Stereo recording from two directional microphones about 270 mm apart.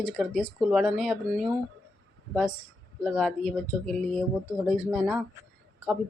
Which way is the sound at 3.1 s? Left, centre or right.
Centre.